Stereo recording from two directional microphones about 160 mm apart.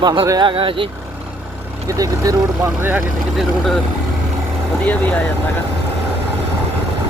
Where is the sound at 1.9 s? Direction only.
20° right (ahead or behind).